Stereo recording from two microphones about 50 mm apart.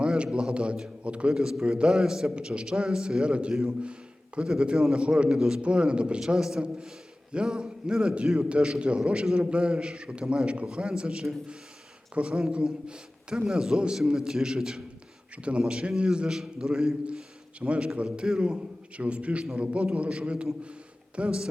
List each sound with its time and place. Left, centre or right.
0.0 s a man's voice: centre
1.9 s a man's voice: centre
3.5 s a man's voice: centre